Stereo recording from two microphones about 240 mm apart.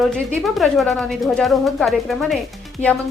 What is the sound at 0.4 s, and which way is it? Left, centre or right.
A woman's voice, centre.